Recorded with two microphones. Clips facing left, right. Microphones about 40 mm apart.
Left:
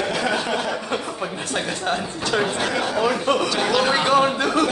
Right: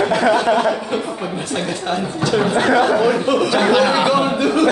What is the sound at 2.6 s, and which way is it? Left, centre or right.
Speech, right.